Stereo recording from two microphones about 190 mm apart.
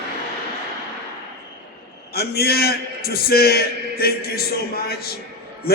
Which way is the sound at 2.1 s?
55° left (ahead or behind).